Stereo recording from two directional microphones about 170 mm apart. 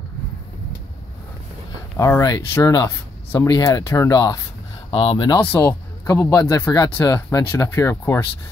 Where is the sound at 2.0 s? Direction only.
15° left (ahead or behind).